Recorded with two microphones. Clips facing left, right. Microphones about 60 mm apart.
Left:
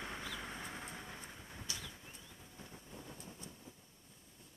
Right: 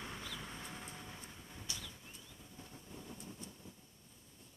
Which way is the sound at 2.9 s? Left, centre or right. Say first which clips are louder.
Right 3 dB; centre.